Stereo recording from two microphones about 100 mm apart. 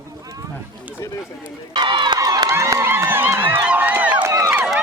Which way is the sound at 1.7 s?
50° right (ahead or behind).